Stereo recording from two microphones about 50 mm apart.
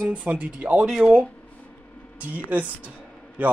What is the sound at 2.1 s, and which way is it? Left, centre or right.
A man's voice, right.